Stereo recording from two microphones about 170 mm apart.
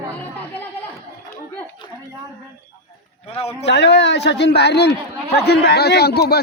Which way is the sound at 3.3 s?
35° left (ahead or behind).